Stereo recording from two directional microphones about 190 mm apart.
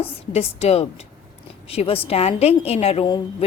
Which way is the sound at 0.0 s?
30° left (ahead or behind).